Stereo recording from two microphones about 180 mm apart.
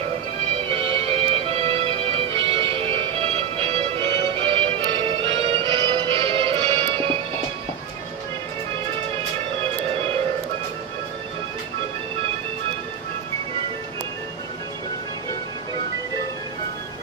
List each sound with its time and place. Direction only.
0.6 s music: 30° right (ahead or behind)